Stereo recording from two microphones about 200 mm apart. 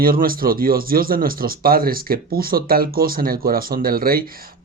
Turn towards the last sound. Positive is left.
turn(degrees=-45)  # may be behind; listen again after turning